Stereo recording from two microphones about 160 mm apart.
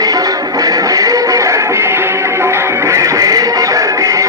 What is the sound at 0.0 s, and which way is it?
Music, 25° right (ahead or behind).